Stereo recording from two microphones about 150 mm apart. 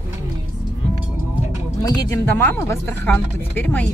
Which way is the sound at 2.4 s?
15° left (ahead or behind).